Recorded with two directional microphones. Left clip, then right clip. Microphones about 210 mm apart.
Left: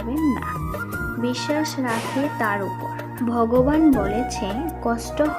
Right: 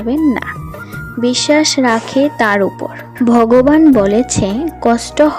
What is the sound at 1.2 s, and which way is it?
Speech, 30° right (ahead or behind).